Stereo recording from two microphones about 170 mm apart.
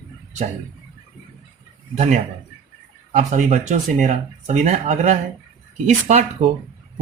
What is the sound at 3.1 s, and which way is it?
A man's voice, 45° right (ahead or behind).